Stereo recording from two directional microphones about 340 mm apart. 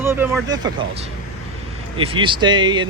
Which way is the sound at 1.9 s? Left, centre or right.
Centre.